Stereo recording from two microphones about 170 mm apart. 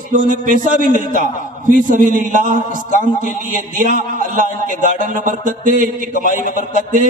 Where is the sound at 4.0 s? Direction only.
50° right (ahead or behind).